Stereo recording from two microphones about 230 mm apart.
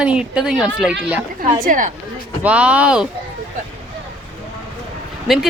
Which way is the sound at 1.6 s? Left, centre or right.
Right.